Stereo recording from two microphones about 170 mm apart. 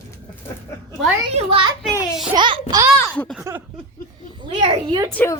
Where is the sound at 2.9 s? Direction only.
10° left (ahead or behind).